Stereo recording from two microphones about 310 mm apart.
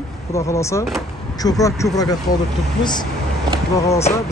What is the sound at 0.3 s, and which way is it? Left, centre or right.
Speech, centre.